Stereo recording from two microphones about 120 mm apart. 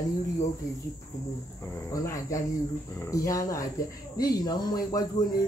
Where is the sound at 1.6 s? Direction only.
25° left (ahead or behind).